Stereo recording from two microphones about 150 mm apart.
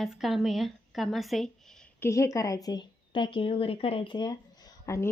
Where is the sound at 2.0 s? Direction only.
20° left (ahead or behind).